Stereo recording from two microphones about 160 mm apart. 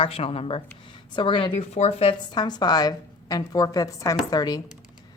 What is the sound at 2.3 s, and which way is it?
A woman's voice, 25° left (ahead or behind).